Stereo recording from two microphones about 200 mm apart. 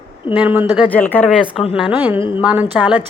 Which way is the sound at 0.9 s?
10° left (ahead or behind).